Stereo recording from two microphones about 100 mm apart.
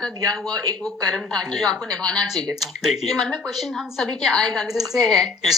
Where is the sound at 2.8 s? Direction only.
Centre (ahead or behind).